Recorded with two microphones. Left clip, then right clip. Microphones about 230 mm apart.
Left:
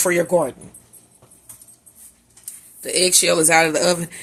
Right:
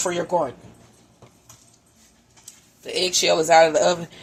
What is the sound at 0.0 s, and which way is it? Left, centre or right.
Speech, left.